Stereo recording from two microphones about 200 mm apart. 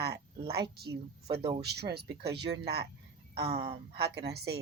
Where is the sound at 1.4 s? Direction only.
30° right (ahead or behind).